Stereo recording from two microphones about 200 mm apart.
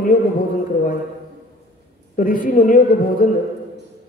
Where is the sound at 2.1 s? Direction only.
40° left (ahead or behind).